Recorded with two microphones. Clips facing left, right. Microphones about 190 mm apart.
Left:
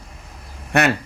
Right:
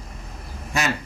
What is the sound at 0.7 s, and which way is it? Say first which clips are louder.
Speech: left 7 dB; 65° left (ahead or behind).